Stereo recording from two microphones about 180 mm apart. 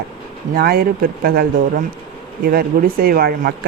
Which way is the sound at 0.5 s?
60° right (ahead or behind).